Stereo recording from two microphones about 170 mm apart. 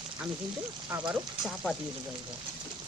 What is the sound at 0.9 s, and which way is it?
Speech, 10° right (ahead or behind).